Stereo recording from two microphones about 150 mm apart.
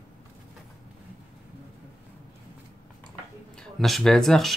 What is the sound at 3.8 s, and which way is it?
Speech, centre (ahead or behind).